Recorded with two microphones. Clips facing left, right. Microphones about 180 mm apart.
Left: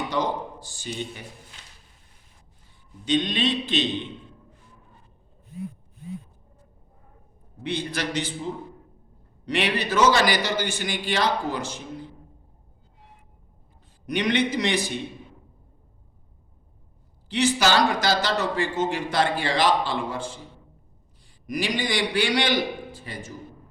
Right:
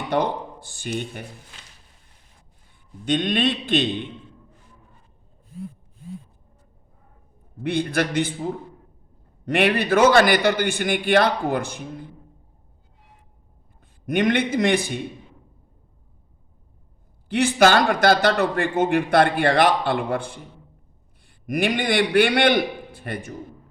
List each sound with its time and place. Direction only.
0.1 s speech: 60° right (ahead or behind)
3.1 s speech: 55° right (ahead or behind)
7.6 s speech: 55° right (ahead or behind)
14.1 s a man's voice: 50° right (ahead or behind)
17.2 s a man's voice: 55° right (ahead or behind)